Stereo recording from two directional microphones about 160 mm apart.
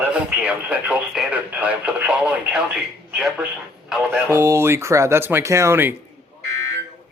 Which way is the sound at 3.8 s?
5° right (ahead or behind).